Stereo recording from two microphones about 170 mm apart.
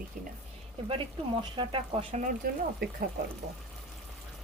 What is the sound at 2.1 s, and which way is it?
Speech, 50° right (ahead or behind).